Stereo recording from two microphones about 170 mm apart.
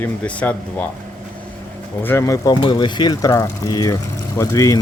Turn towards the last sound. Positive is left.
turn(degrees=20)  # may be behind; listen again after turning